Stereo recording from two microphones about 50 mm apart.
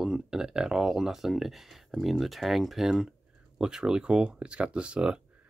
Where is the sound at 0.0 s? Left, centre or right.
Centre.